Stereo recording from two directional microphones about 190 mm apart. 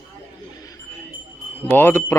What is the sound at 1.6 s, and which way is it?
Speech, 10° left (ahead or behind).